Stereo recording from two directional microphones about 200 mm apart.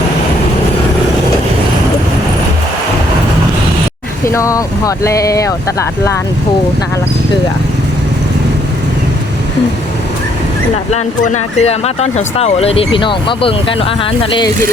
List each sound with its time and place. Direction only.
4.3 s speech: 15° left (ahead or behind)
10.9 s speech: 35° left (ahead or behind)